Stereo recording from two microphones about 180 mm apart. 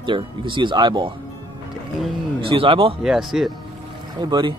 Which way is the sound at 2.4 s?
30° right (ahead or behind).